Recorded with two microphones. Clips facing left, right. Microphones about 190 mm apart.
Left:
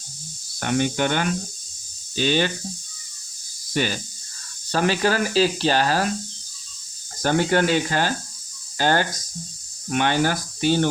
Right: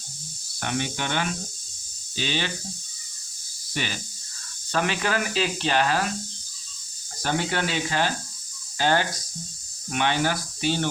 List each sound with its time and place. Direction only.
0.6 s speech: 50° left (ahead or behind)
4.7 s speech: 35° left (ahead or behind)
7.2 s speech: 45° left (ahead or behind)